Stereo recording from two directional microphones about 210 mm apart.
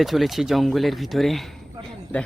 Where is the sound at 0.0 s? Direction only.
Centre (ahead or behind).